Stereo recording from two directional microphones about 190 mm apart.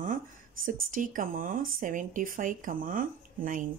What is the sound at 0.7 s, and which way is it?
Speech, 45° right (ahead or behind).